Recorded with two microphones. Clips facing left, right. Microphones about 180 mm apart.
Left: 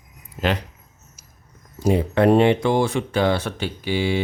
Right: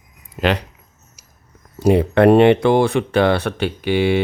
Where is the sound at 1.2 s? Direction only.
70° right (ahead or behind).